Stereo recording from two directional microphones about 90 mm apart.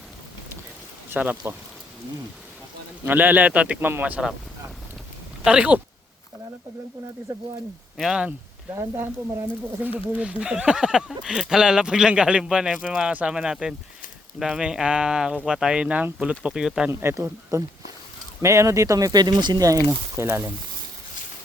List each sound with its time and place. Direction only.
1.1 s speech: 20° right (ahead or behind)
3.1 s speech: 20° right (ahead or behind)
5.5 s speech: 15° right (ahead or behind)
7.9 s speech: centre (ahead or behind)
10.1 s speech: 15° right (ahead or behind)
16.9 s speech: 30° right (ahead or behind); by 19.6 s 55° right (ahead or behind)
19.6 s speech: 35° right (ahead or behind)